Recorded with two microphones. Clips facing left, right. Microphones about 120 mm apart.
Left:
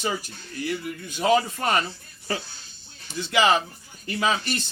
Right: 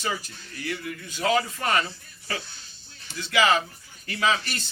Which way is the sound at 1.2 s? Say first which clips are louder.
Left 3 dB; 20° left (ahead or behind).